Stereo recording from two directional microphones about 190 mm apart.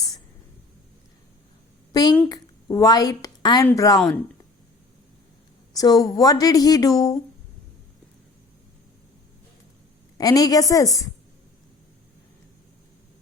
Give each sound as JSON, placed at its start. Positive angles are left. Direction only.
{"t": 1.9, "sound": "a sound", "side_deg": 20}
{"t": 2.3, "sound": "a woman's voice", "side_deg": 20}
{"t": 5.7, "sound": "speech", "side_deg": 20}
{"t": 10.2, "sound": "speech", "side_deg": 20}